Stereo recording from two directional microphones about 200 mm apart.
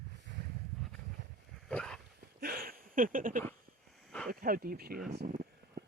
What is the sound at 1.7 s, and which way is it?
Dog, 5° left (ahead or behind).